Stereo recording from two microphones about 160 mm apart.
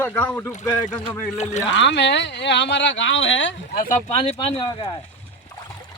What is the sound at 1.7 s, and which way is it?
Speech, 90° left.